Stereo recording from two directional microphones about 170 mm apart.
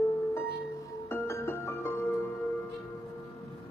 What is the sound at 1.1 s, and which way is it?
Music, 15° left (ahead or behind).